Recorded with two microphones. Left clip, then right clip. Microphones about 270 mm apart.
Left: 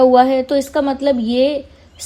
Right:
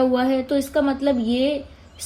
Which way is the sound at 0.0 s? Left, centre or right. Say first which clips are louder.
Left 9 dB; left.